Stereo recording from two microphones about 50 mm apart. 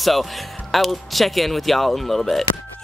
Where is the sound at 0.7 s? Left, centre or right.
Centre.